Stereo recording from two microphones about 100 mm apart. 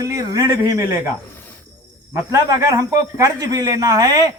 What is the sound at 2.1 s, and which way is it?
Speech, 30° right (ahead or behind).